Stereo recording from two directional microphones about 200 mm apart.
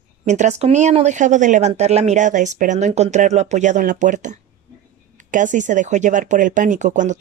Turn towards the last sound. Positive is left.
turn(degrees=-40)  # may be behind; listen again after turning